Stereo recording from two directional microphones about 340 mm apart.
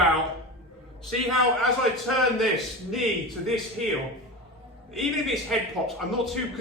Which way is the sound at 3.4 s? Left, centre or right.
Centre.